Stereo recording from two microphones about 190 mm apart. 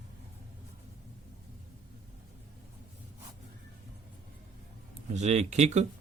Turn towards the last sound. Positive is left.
turn(degrees=-35)  # may be behind; listen again after turning